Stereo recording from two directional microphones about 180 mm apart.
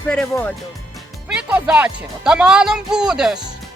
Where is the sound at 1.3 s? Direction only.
5° right (ahead or behind).